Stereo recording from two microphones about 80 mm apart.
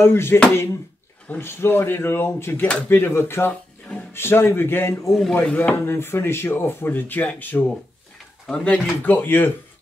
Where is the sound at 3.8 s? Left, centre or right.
Centre.